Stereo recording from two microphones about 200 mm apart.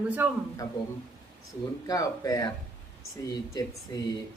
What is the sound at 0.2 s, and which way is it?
Speech, 10° right (ahead or behind).